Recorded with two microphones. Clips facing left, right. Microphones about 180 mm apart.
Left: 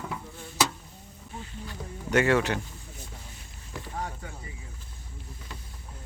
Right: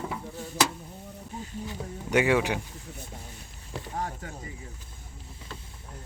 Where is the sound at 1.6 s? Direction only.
10° right (ahead or behind).